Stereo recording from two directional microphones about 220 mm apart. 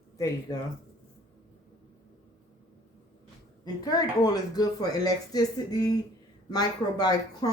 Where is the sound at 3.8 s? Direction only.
15° left (ahead or behind).